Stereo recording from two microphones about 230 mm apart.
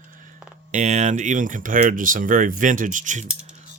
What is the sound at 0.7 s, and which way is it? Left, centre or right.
Speech, right.